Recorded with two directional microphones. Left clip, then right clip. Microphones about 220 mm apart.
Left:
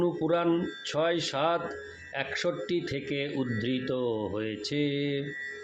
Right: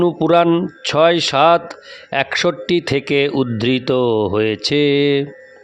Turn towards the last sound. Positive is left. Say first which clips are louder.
# right 16 dB
turn(degrees=-45)  # may be behind; listen again after turning